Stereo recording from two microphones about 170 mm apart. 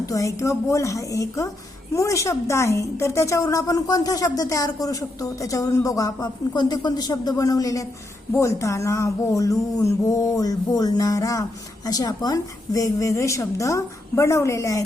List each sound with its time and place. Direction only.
0.0 s a woman's voice: 20° left (ahead or behind)